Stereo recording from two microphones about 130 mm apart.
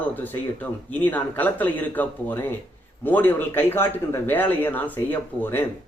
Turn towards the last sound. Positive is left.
turn(degrees=15)  # may be behind; listen again after turning